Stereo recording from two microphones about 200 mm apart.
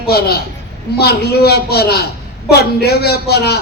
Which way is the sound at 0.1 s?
50° left (ahead or behind).